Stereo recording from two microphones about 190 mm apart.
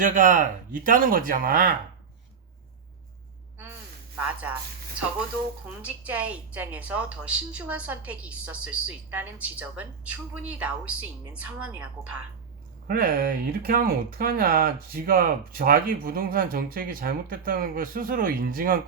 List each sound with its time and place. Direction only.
0.0 s speech: 45° right (ahead or behind)
4.3 s a woman's voice: 10° right (ahead or behind)
5.8 s a woman's voice: 5° right (ahead or behind)
12.9 s speech: 50° right (ahead or behind)